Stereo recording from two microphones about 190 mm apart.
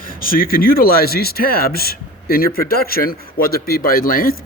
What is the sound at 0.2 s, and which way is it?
Speech, 50° left (ahead or behind).